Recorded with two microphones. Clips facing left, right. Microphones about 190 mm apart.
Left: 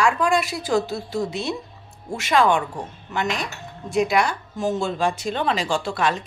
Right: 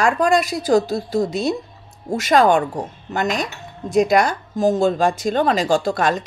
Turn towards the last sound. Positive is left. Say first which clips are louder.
# right 5 dB
turn(degrees=-40)  # may be behind; listen again after turning